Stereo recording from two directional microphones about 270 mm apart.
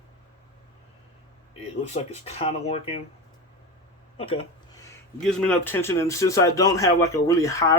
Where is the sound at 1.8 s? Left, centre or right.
Left.